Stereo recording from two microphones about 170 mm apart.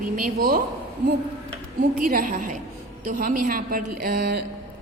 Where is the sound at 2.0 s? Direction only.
55° right (ahead or behind); by 4.4 s 70° right (ahead or behind).